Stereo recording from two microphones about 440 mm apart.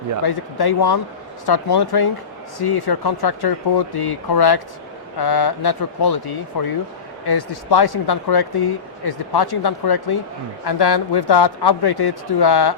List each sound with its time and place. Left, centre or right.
0.2 s speech: left